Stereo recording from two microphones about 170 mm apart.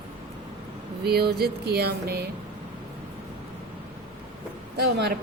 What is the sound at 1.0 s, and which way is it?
Speech, 70° right (ahead or behind).